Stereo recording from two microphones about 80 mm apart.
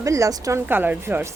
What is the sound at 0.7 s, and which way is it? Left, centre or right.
Speech, right.